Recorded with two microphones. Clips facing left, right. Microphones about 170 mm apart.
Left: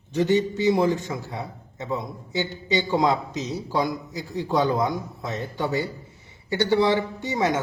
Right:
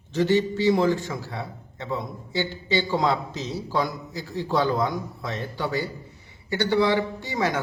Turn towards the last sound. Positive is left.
turn(degrees=25)  # may be behind; listen again after turning